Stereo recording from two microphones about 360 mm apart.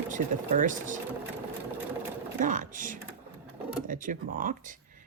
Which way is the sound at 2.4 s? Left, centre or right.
Right.